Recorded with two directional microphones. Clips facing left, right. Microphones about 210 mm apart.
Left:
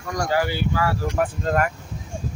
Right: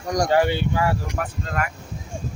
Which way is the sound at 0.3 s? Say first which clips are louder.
Right 1 dB; 25° right (ahead or behind).